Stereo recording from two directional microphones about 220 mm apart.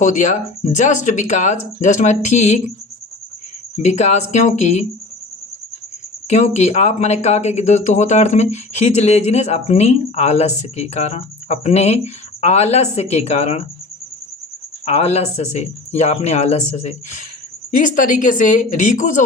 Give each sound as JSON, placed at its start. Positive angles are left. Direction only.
{"t": 0.0, "sound": "speech", "side_deg": 35}
{"t": 3.8, "sound": "speech", "side_deg": 30}
{"t": 6.2, "sound": "speech", "side_deg": 30}
{"t": 14.8, "sound": "speech", "side_deg": 30}